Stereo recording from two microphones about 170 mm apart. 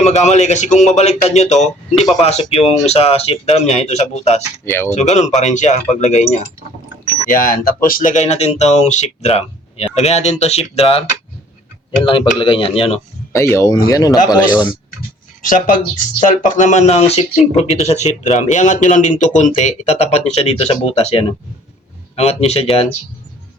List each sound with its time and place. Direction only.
0.0 s speech: 40° left (ahead or behind)
4.6 s speech: 15° left (ahead or behind)
4.9 s speech: 45° left (ahead or behind)
7.3 s speech: 55° left (ahead or behind); by 11.0 s 35° left (ahead or behind)
12.0 s speech: 30° left (ahead or behind)
13.3 s speech: 20° left (ahead or behind)
15.4 s speech: 50° left (ahead or behind); by 22.9 s 35° left (ahead or behind)